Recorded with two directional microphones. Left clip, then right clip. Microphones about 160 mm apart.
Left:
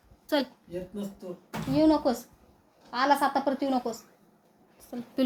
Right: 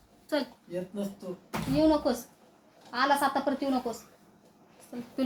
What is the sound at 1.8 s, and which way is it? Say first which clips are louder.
A woman's voice: left 2 dB; 55° left (ahead or behind).